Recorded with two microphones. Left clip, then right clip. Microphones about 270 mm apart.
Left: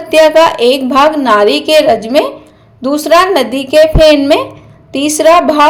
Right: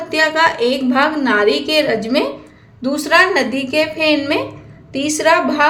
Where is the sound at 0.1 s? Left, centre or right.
Centre.